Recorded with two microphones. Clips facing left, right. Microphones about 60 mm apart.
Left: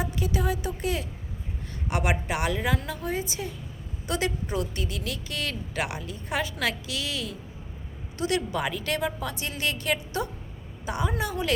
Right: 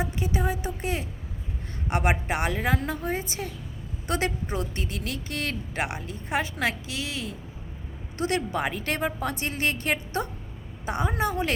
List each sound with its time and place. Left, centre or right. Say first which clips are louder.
0.0 s a woman's voice: even; right
8.2 s a woman's voice: even; right